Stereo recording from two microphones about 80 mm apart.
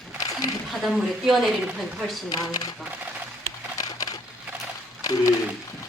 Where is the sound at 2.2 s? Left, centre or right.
Left.